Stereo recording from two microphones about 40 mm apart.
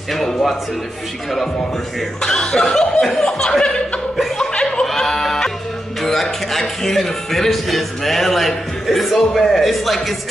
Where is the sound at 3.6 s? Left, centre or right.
Left.